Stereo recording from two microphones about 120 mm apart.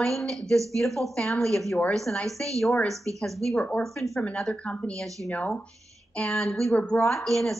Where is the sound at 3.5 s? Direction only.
10° left (ahead or behind).